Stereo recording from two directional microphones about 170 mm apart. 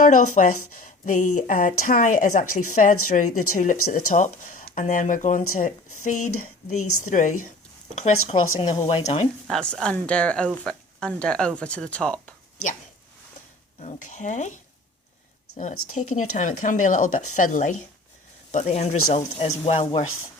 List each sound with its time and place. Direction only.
0.0 s speech: 50° left (ahead or behind)
9.5 s speech: 5° left (ahead or behind)
13.7 s speech: 45° left (ahead or behind)
15.5 s speech: 50° left (ahead or behind)